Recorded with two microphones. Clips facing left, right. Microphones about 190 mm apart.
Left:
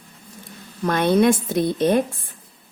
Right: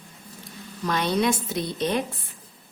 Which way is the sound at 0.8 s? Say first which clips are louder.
Left 7 dB; 55° left (ahead or behind).